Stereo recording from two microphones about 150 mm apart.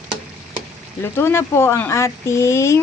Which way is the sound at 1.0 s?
15° left (ahead or behind).